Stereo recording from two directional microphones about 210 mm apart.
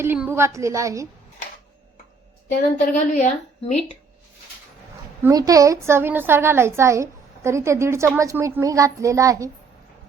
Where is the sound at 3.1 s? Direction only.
35° left (ahead or behind).